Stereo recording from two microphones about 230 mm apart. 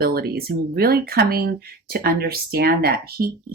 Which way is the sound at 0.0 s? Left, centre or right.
Right.